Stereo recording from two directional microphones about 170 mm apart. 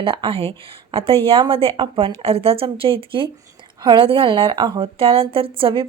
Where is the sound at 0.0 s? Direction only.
30° right (ahead or behind).